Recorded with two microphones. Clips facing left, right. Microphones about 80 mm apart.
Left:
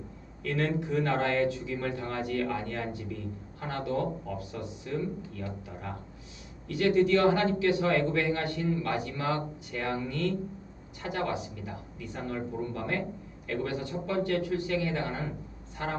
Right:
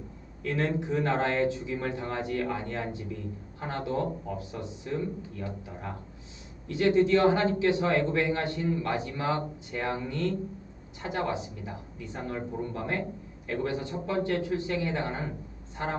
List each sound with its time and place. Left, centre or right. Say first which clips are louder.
0.4 s a man's voice: right 1 dB; right